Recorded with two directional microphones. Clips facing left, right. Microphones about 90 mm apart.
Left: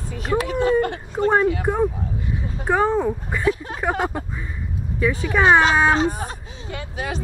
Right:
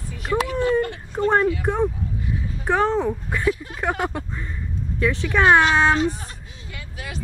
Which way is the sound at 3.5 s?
30° left (ahead or behind).